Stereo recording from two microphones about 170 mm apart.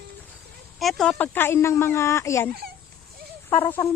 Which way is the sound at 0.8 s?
Centre (ahead or behind).